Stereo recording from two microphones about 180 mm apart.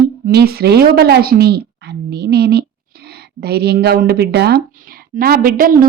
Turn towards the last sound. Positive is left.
turn(degrees=-50)  # may be behind; listen again after turning